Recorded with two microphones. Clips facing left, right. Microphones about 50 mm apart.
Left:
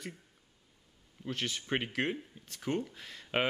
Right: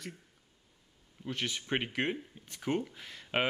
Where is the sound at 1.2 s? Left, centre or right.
Centre.